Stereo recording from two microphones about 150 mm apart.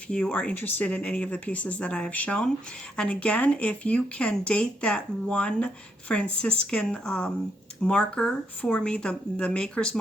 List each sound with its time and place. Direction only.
0.1 s speech: 5° left (ahead or behind)